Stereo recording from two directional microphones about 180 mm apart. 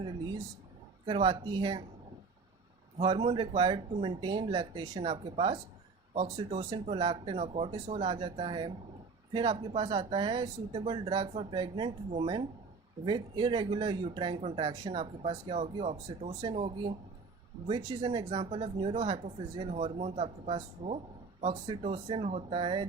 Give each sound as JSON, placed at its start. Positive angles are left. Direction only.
{"t": 1.0, "sound": "speech", "side_deg": -25}
{"t": 3.0, "sound": "speech", "side_deg": -30}
{"t": 6.7, "sound": "speech", "side_deg": -30}